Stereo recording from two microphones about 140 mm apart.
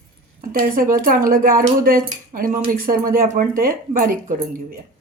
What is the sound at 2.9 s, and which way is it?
Speech, 90° right.